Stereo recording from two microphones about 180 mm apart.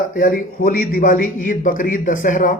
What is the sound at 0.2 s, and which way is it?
Speech, 50° left (ahead or behind).